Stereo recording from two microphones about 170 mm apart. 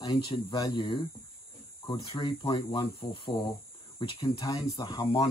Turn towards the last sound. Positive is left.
turn(degrees=25)  # may be behind; listen again after turning